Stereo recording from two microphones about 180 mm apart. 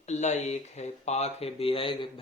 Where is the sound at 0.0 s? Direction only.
40° left (ahead or behind).